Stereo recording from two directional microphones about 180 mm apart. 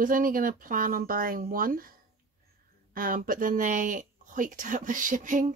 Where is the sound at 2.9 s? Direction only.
50° right (ahead or behind).